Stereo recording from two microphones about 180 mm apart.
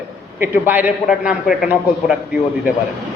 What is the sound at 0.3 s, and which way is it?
A man's voice, 10° right (ahead or behind).